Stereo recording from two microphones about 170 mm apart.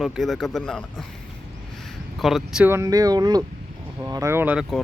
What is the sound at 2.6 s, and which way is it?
Speech, 15° right (ahead or behind).